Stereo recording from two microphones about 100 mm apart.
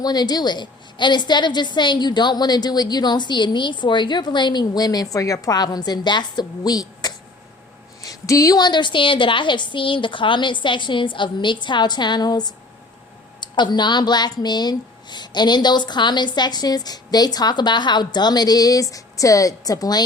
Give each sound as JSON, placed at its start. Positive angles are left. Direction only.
{"t": 0.0, "sound": "a woman's voice", "side_deg": 40}